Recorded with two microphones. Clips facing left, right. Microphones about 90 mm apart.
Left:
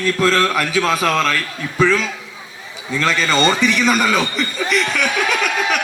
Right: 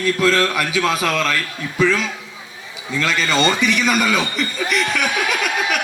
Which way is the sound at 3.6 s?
35° left (ahead or behind).